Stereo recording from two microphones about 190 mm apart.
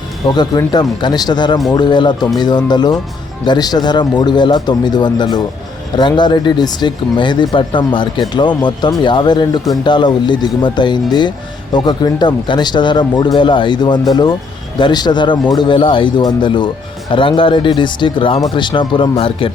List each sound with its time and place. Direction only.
0.3 s speech: 20° left (ahead or behind)